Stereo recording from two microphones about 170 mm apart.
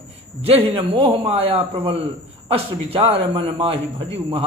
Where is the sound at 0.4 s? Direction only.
35° right (ahead or behind).